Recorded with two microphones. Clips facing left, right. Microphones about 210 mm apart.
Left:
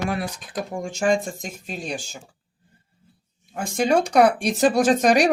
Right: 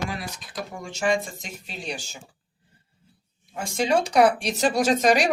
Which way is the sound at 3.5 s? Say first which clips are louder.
Left 3 dB; 50° left (ahead or behind).